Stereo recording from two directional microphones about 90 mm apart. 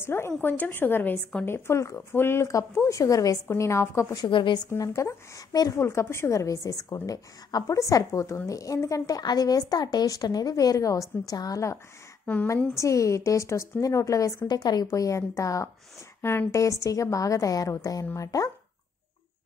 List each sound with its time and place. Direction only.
0.0 s a woman's voice: 30° left (ahead or behind)
4.3 s a woman's voice: 60° left (ahead or behind)
4.7 s a woman's voice: 35° left (ahead or behind)